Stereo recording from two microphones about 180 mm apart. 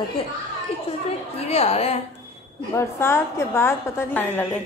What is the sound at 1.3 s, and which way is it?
Speech, 35° left (ahead or behind).